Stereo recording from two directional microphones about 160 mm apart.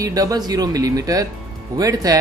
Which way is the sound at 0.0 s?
20° right (ahead or behind).